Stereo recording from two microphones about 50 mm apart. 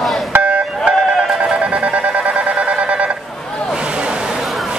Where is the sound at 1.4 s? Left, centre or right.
Right.